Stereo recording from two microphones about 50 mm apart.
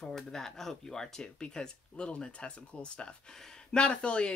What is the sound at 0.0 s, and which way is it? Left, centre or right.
Speech, centre.